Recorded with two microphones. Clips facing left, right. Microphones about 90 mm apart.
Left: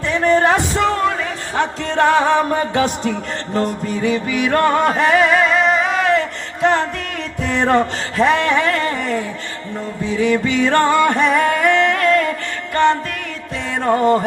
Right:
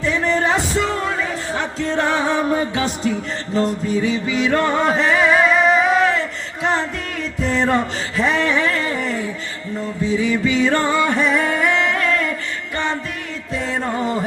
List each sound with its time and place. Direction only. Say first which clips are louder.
0.0 s music: left 4 dB; 45° left (ahead or behind)
6.0 s a sound: left 1 dB; 60° left (ahead or behind)
7.4 s music: left 3 dB; 55° left (ahead or behind)
13.8 s music: left 12 dB; 55° left (ahead or behind)